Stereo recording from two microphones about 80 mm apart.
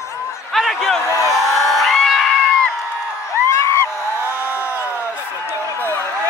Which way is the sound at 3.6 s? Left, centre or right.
Left.